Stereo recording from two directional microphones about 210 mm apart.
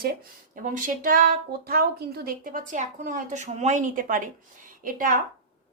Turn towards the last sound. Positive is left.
turn(degrees=-40)  # may be behind; listen again after turning